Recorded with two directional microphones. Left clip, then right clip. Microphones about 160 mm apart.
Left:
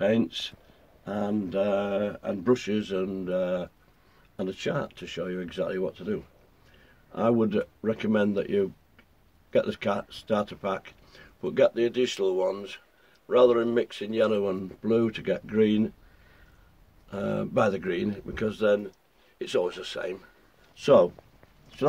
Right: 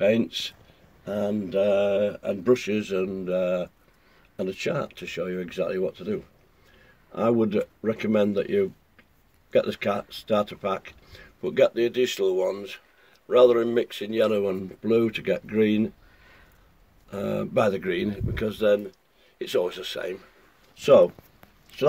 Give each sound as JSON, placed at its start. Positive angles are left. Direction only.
{"t": 0.0, "sound": "speech", "side_deg": -10}
{"t": 17.1, "sound": "speech", "side_deg": -10}